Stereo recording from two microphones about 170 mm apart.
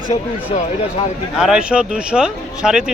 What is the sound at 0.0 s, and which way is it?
Speech, 45° left (ahead or behind).